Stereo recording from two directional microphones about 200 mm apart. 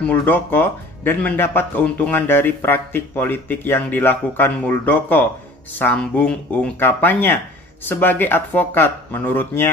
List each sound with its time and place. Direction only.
0.0 s a man's voice: 10° left (ahead or behind)